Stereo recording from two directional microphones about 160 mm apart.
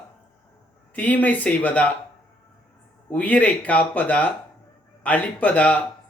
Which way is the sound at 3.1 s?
10° left (ahead or behind).